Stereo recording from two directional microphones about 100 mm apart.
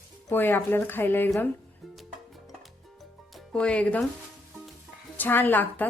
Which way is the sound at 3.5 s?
10° left (ahead or behind).